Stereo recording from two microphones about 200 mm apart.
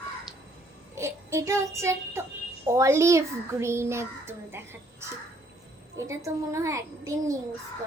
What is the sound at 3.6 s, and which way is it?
Child singing, 15° right (ahead or behind).